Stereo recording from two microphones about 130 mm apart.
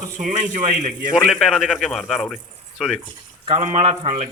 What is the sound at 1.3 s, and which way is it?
Speech, centre (ahead or behind).